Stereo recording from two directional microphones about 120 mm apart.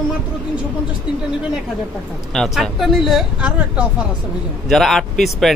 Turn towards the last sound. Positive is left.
turn(degrees=0)  # may be behind; listen again after turning